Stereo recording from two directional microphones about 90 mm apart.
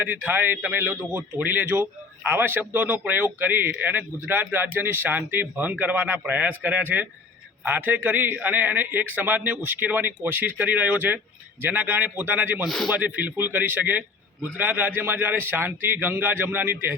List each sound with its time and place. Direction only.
0.0 s speech: 20° right (ahead or behind)
12.6 s a man's voice: 5° left (ahead or behind)
12.9 s speech: 15° right (ahead or behind)